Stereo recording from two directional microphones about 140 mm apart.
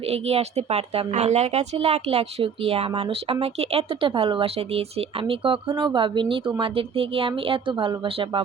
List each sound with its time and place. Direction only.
0.0 s speech: 45° right (ahead or behind)